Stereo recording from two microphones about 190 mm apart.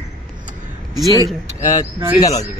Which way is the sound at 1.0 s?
20° left (ahead or behind).